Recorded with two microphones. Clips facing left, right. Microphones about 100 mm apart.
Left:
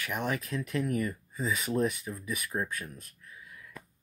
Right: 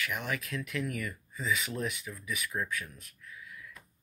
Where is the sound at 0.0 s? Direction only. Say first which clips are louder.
Left 3 dB; 35° left (ahead or behind).